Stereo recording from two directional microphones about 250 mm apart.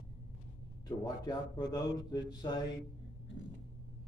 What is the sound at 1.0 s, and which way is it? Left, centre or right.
A man's voice, centre.